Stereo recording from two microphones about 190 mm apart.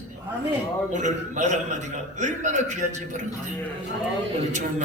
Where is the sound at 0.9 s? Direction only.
40° right (ahead or behind).